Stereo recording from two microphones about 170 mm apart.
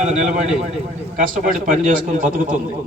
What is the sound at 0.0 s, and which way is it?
A man's voice, 45° right (ahead or behind).